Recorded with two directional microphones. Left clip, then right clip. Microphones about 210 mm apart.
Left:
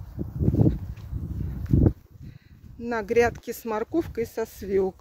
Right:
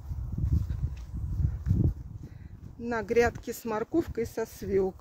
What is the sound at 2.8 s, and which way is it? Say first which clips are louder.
Speech: left 3 dB; 15° left (ahead or behind).